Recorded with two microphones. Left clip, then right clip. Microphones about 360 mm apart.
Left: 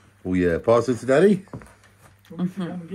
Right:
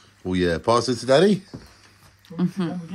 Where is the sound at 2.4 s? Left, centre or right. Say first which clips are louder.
Right 3 dB; right.